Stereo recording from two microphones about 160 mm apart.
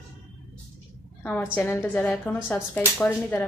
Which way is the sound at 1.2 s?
10° left (ahead or behind).